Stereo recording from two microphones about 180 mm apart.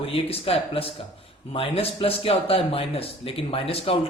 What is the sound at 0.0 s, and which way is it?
Speech, 30° left (ahead or behind).